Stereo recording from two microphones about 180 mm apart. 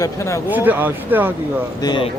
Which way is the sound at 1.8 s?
25° left (ahead or behind).